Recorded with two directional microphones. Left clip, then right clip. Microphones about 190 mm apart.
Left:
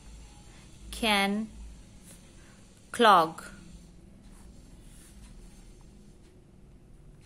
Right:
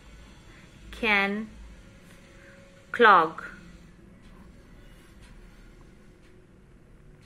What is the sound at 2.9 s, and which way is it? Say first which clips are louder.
Speech: right 3 dB; 45° left (ahead or behind).